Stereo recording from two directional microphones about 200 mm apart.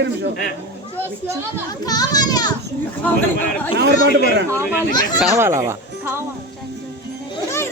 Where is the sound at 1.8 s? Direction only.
20° left (ahead or behind).